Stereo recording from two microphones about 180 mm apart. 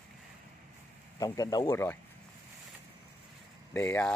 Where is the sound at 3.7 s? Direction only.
10° left (ahead or behind).